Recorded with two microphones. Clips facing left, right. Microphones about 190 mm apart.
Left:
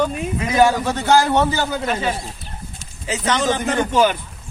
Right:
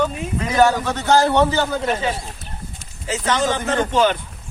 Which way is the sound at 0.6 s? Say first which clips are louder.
Even; 10° left (ahead or behind).